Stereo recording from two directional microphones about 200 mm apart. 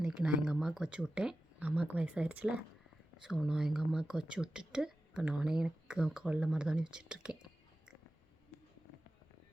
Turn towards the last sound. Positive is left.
turn(degrees=-5)  # may be behind; listen again after turning